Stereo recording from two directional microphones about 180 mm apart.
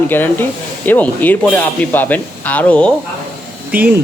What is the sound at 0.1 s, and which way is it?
Speech, 10° left (ahead or behind).